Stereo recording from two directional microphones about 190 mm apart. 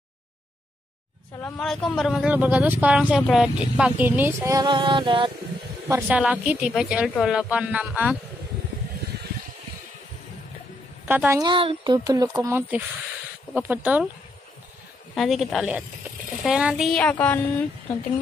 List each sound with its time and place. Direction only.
1.4 s speech: 5° left (ahead or behind); by 5.3 s 25° right (ahead or behind)
5.9 s speech: 10° right (ahead or behind)
11.1 s speech: 10° right (ahead or behind)
11.4 s speech: 25° right (ahead or behind); by 14.0 s 10° right (ahead or behind)
15.1 s a woman's voice: centre (ahead or behind)